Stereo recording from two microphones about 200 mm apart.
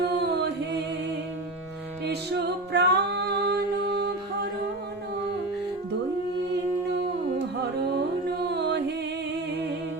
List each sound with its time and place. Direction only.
0.0 s chant: 55° right (ahead or behind)
2.7 s music: 55° right (ahead or behind)
7.6 s music: 55° right (ahead or behind)